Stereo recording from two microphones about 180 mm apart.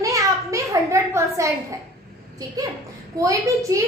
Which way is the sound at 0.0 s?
20° right (ahead or behind).